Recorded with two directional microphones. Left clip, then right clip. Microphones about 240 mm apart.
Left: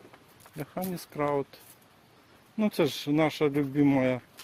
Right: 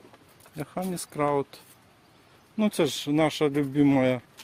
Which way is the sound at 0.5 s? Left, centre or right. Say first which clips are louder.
Right 3 dB; centre.